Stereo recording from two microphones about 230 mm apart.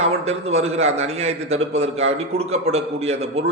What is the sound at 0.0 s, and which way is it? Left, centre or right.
A man's voice, right.